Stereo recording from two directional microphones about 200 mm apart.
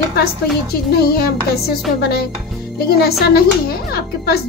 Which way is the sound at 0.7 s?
50° left (ahead or behind).